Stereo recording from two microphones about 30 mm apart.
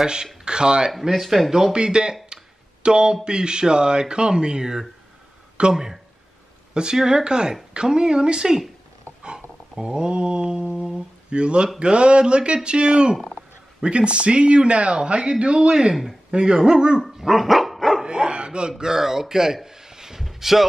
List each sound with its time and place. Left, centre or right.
0.0 s speech: right
1.0 s speech: centre
1.7 s speech: right
9.2 s mantra: right
11.2 s a man's voice: right
17.2 s dog: centre
18.0 s dog: right
18.7 s a man's voice: centre
20.2 s a sound: centre